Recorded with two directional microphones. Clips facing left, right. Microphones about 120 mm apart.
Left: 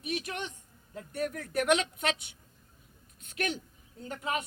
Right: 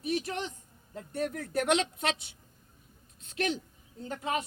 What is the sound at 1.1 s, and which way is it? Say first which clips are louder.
A woman's voice: right 1 dB; 30° right (ahead or behind).